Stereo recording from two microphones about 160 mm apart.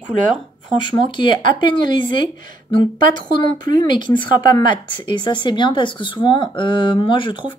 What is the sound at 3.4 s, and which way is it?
Speech, 30° left (ahead or behind).